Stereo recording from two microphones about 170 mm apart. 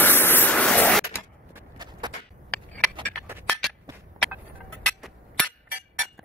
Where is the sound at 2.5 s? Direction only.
10° left (ahead or behind).